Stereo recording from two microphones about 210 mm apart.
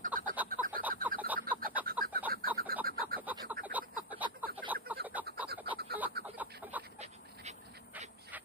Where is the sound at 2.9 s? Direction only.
45° right (ahead or behind).